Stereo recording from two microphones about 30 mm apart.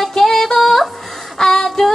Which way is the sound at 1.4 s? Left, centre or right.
Centre.